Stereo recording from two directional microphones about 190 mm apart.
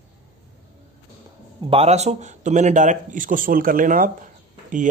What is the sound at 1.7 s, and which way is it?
A man's voice, 30° right (ahead or behind).